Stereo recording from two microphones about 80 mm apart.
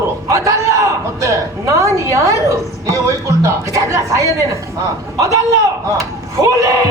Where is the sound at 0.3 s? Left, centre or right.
Right.